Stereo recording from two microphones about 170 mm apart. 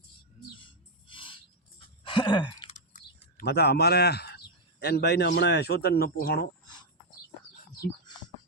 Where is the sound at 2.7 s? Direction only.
40° left (ahead or behind).